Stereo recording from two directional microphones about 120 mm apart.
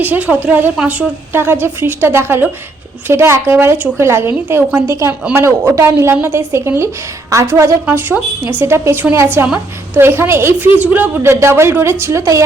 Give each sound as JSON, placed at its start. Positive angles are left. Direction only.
{"t": 0.0, "sound": "a woman's voice", "side_deg": -15}